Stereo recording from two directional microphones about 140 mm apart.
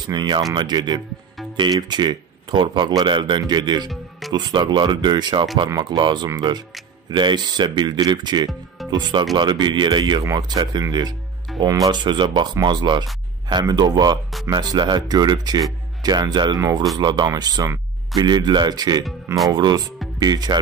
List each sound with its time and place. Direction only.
0.0 s speech: 30° right (ahead or behind)